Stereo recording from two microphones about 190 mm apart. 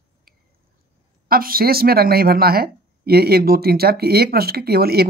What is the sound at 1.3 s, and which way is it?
Speech, 50° right (ahead or behind).